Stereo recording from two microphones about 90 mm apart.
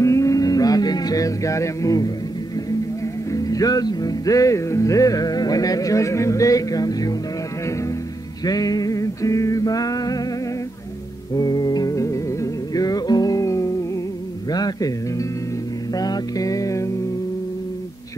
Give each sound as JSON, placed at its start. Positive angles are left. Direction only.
{"t": 0.0, "sound": "music", "side_deg": 35}
{"t": 3.3, "sound": "music", "side_deg": 40}
{"t": 8.5, "sound": "music", "side_deg": 45}
{"t": 11.3, "sound": "music", "side_deg": 45}
{"t": 14.5, "sound": "a sound", "side_deg": 45}
{"t": 15.9, "sound": "music", "side_deg": 45}